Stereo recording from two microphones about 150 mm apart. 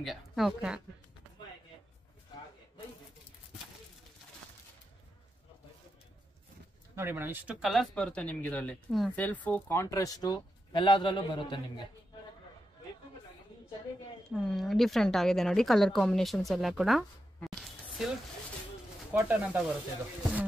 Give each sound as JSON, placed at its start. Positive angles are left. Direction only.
{"t": 0.0, "sound": "a woman's voice", "side_deg": 0}
{"t": 7.0, "sound": "speech", "side_deg": -15}
{"t": 7.6, "sound": "speech", "side_deg": 0}
{"t": 14.4, "sound": "a woman's voice", "side_deg": 0}
{"t": 19.1, "sound": "speech", "side_deg": -10}